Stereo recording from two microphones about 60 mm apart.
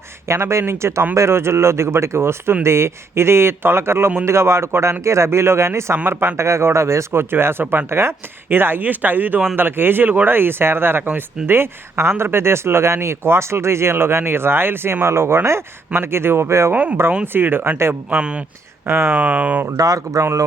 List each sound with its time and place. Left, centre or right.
0.3 s speech: right
16.7 s speech: right
17.3 s speech: right
18.1 s speech: centre
18.9 s speech: right
19.1 s speech: right
19.7 s speech: right